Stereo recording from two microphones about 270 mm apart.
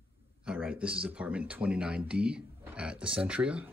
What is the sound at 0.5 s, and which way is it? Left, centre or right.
Speech, centre.